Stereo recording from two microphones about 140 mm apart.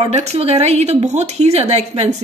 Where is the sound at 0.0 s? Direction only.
50° right (ahead or behind).